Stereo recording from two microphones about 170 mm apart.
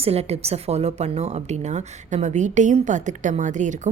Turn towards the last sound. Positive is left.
turn(degrees=-45)  # may be behind; listen again after turning